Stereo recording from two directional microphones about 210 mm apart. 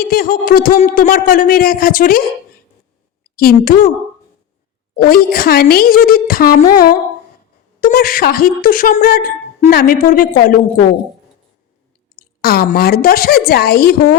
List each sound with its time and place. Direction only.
0.0 s a woman's voice: 45° left (ahead or behind)
3.3 s a woman's voice: 45° left (ahead or behind)
4.9 s a woman's voice: 45° left (ahead or behind)
12.2 s a woman's voice: 45° left (ahead or behind)